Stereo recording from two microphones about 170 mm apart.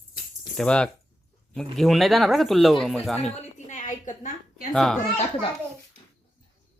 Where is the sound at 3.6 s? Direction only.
45° left (ahead or behind).